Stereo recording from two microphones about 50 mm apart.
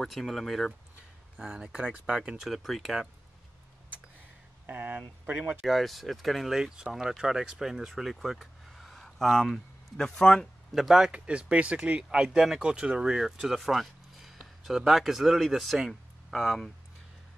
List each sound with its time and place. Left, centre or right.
0.1 s speech: centre
1.4 s speech: centre
2.4 s speech: centre
4.6 s speech: right
5.6 s speech: centre
6.5 s speech: centre
10.3 s speech: centre
11.1 s speech: right
12.1 s speech: centre